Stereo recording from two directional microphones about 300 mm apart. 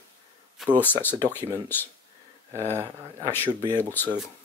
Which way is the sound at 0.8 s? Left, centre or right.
Centre.